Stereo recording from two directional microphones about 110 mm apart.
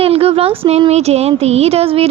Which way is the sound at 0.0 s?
60° right (ahead or behind).